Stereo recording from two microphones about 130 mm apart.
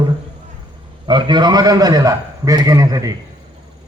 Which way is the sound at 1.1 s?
35° right (ahead or behind).